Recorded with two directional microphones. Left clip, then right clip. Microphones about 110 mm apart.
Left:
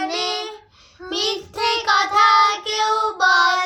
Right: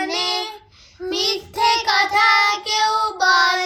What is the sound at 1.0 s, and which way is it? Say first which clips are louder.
Child singing: right 4 dB; 5° left (ahead or behind).